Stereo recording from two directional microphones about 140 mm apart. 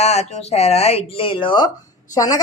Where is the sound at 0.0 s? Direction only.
50° left (ahead or behind).